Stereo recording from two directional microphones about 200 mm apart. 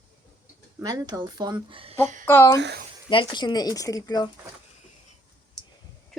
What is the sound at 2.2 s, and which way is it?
Speech, 10° left (ahead or behind).